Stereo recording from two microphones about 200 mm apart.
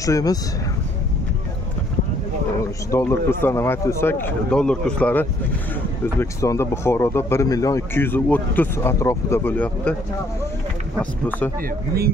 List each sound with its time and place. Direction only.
0.0 s speech: 15° left (ahead or behind)
2.9 s speech: 10° left (ahead or behind)
11.0 s speech: 10° left (ahead or behind)